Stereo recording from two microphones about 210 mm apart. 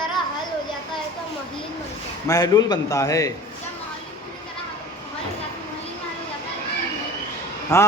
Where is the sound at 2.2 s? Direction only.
15° left (ahead or behind).